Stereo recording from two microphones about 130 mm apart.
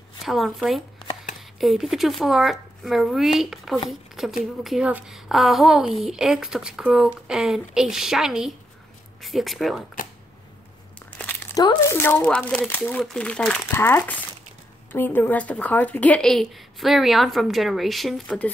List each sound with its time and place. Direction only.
0.2 s speech: centre (ahead or behind)
11.0 s crumpling: 10° left (ahead or behind)
11.5 s speech: 35° left (ahead or behind)
11.9 s speech: 15° left (ahead or behind)